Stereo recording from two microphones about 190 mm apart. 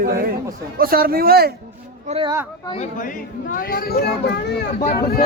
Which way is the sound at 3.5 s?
50° left (ahead or behind).